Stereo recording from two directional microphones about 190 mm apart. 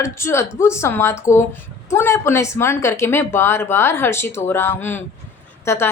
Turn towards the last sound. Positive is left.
turn(degrees=15)  # may be behind; listen again after turning